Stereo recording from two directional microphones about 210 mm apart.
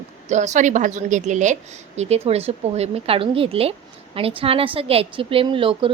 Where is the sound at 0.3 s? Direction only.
35° right (ahead or behind).